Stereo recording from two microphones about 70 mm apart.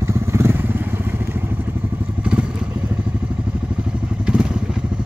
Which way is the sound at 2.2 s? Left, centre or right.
Centre.